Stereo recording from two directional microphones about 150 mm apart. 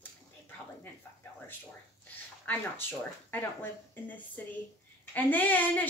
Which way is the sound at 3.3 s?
10° left (ahead or behind).